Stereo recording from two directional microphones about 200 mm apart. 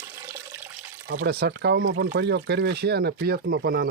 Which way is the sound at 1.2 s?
55° right (ahead or behind).